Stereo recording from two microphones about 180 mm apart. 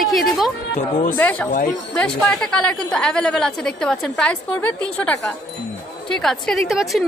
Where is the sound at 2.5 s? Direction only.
5° left (ahead or behind).